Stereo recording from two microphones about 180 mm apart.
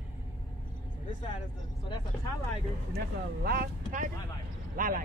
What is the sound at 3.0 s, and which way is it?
Speech, 55° right (ahead or behind).